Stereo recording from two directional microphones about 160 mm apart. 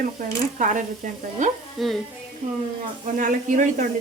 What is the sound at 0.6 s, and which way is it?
Stir, 55° right (ahead or behind).